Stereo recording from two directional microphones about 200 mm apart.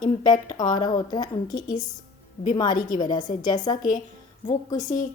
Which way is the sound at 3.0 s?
20° left (ahead or behind).